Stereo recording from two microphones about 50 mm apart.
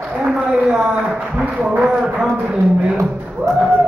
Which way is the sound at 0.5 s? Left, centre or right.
Centre.